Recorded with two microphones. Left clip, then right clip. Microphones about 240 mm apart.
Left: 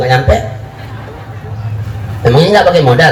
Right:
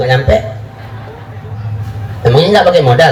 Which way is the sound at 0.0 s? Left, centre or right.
Right.